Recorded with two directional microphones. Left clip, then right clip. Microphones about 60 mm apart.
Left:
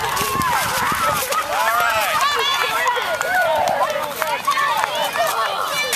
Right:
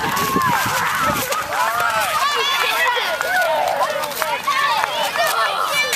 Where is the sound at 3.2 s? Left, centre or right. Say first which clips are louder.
Even; centre.